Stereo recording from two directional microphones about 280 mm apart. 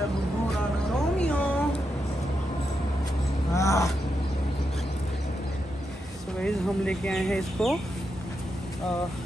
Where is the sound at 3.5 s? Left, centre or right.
Centre.